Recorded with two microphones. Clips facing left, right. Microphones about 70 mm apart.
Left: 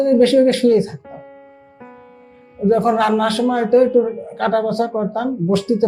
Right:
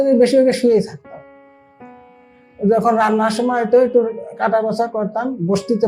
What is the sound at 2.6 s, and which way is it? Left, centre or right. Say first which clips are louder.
A man's voice: right 1 dB; right.